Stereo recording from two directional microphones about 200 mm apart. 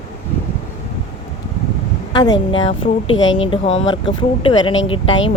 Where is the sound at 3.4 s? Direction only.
30° left (ahead or behind).